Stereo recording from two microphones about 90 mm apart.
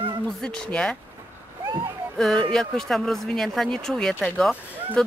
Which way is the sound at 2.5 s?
5° left (ahead or behind).